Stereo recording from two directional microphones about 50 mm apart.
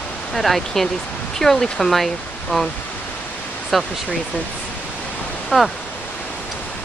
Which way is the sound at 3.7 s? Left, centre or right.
Centre.